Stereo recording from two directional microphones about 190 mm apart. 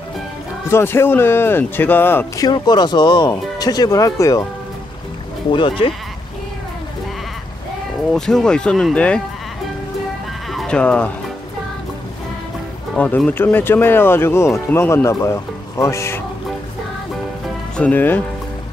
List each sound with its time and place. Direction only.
0.7 s speech: 10° left (ahead or behind)
5.5 s speech: 25° left (ahead or behind)
8.1 s speech: centre (ahead or behind)
10.5 s sheep: 5° left (ahead or behind)
12.9 s speech: 10° left (ahead or behind)
17.7 s speech: 10° left (ahead or behind)